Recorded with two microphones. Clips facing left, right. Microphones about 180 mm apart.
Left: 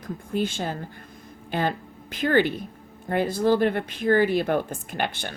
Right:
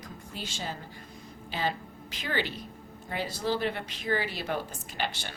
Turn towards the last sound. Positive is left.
turn(degrees=55)  # may be behind; listen again after turning